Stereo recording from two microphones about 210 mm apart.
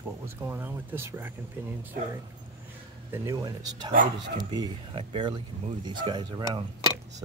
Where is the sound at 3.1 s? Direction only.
15° right (ahead or behind).